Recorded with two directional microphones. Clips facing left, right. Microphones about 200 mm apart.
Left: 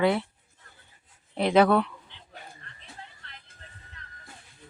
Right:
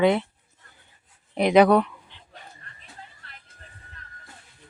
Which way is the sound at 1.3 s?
15° right (ahead or behind).